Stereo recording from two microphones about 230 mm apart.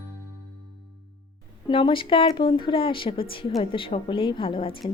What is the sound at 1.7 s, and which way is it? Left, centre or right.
Speech, left.